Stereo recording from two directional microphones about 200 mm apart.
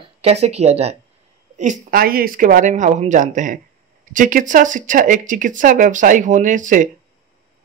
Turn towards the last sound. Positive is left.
turn(degrees=-40)  # may be behind; listen again after turning